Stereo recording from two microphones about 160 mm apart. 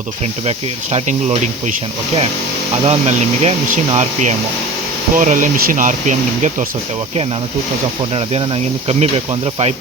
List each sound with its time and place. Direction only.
0.9 s speech: 45° right (ahead or behind)
2.8 s speech: 45° right (ahead or behind)
8.1 s speech: 35° right (ahead or behind)